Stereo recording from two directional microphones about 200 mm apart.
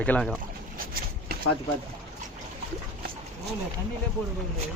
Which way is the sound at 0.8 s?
45° right (ahead or behind).